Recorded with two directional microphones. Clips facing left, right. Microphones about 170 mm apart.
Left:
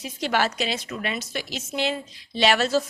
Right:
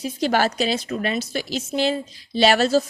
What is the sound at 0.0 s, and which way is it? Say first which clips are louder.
A woman's voice: right 4 dB; 35° right (ahead or behind).